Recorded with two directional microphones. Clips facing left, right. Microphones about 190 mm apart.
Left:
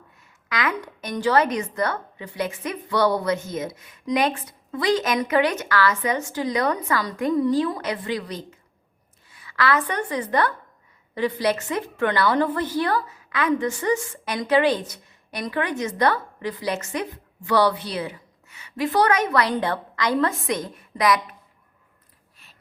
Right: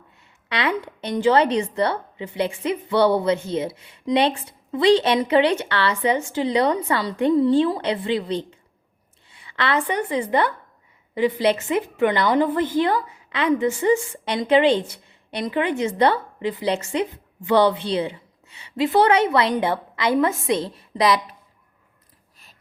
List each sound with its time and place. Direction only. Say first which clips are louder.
0.4 s a woman's voice: right 3 dB; 30° right (ahead or behind)
9.3 s a sound: left 1 dB; 25° right (ahead or behind)
11.1 s a woman's voice: right 3 dB; 20° right (ahead or behind)